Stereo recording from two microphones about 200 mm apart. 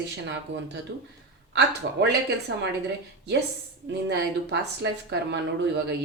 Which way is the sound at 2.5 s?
70° right (ahead or behind).